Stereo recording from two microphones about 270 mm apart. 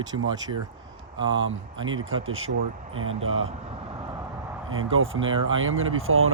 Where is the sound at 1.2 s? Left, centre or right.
Right.